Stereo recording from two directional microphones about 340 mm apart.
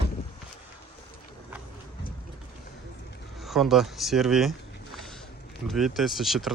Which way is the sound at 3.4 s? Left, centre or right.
Centre.